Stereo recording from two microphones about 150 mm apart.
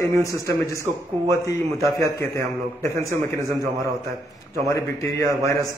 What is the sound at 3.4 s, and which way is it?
Speech, 20° right (ahead or behind).